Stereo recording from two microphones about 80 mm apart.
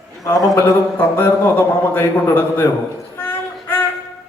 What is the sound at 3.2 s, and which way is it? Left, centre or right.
Child singing, left.